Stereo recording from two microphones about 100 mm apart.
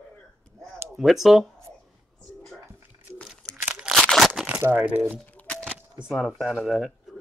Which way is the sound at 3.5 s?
15° right (ahead or behind).